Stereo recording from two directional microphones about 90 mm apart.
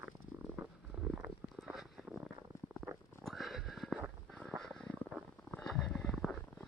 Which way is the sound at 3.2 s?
Centre (ahead or behind).